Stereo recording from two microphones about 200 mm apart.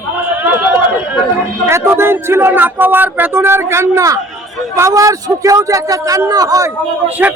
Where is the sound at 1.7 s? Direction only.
10° right (ahead or behind).